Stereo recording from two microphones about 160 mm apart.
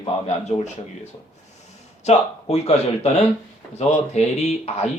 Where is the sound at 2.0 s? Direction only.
45° left (ahead or behind).